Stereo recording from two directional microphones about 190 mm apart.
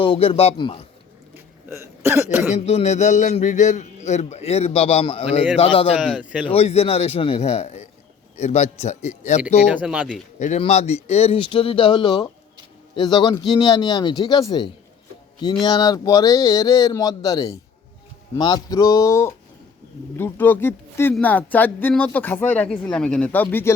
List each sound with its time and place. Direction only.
0.0 s a man's voice: 30° left (ahead or behind)
1.7 s speech: 15° right (ahead or behind)
2.5 s a man's voice: 35° left (ahead or behind)
6.0 s speech: 5° right (ahead or behind)
6.5 s a man's voice: 30° left (ahead or behind)
9.6 s speech: 5° right (ahead or behind)
10.4 s speech: 35° left (ahead or behind); by 23.7 s 10° left (ahead or behind)